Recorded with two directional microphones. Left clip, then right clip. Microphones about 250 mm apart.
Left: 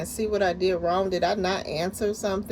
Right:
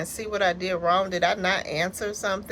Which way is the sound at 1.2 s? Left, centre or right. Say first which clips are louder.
Right 2 dB; right.